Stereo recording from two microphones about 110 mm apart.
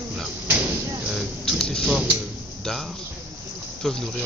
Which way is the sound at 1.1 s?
Centre (ahead or behind).